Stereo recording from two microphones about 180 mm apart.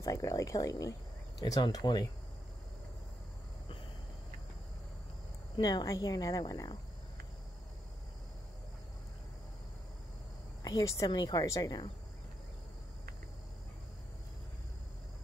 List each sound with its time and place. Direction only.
0.0 s speech: 20° left (ahead or behind)
5.6 s speech: 20° left (ahead or behind)
10.6 s speech: 20° left (ahead or behind)